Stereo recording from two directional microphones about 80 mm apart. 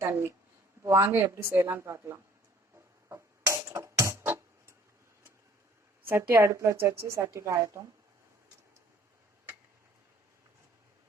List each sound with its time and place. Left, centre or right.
0.9 s a woman's voice: right
2.7 s music: right
6.1 s a woman's voice: right